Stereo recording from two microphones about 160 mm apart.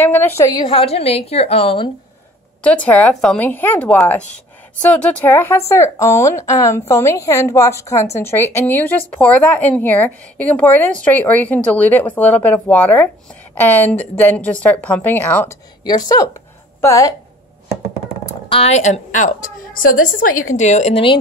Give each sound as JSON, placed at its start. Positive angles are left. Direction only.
{"t": 0.0, "sound": "a woman's voice", "side_deg": 15}
{"t": 2.6, "sound": "a woman's voice", "side_deg": 10}
{"t": 15.8, "sound": "speech", "side_deg": 25}
{"t": 18.5, "sound": "a woman's voice", "side_deg": 40}